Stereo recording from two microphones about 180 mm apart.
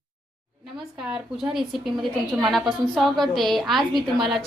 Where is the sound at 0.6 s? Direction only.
5° right (ahead or behind).